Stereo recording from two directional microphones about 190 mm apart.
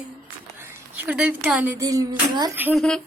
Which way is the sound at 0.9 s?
5° right (ahead or behind).